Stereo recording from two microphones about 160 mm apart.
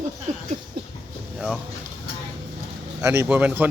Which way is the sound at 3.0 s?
15° right (ahead or behind).